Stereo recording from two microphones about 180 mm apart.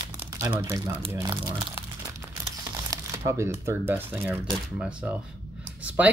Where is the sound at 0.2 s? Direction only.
15° right (ahead or behind).